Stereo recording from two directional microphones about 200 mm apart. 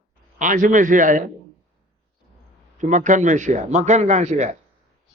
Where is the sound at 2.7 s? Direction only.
40° right (ahead or behind).